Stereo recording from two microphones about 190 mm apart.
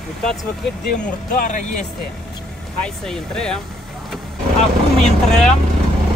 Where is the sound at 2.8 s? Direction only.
Centre (ahead or behind).